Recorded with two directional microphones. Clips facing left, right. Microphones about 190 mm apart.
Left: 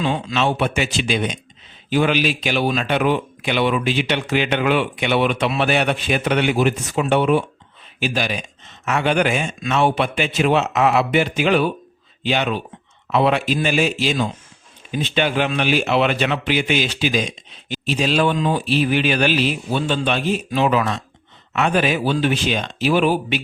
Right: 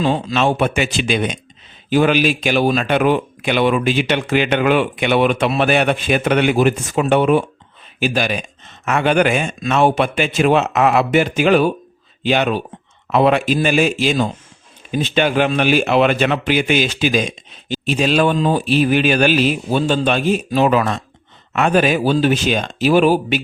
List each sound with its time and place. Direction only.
0.0 s speech: 40° right (ahead or behind)